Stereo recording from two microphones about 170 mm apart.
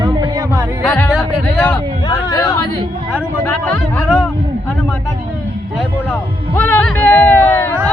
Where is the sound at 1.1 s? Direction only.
Centre (ahead or behind).